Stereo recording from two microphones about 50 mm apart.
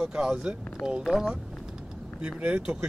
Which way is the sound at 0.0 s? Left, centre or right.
Centre.